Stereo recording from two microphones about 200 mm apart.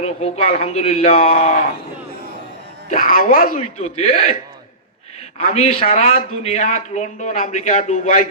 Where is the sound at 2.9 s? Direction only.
45° left (ahead or behind).